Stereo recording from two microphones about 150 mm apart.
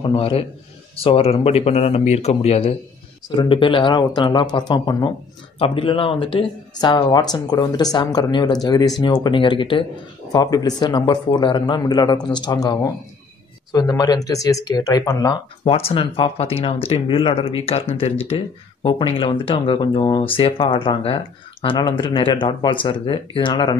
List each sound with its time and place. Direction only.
0.0 s speech: 40° left (ahead or behind)
3.3 s speech: 30° left (ahead or behind)
15.6 s speech: 40° left (ahead or behind)